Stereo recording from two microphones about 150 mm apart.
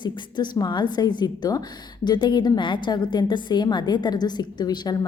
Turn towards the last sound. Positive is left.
turn(degrees=25)  # may be behind; listen again after turning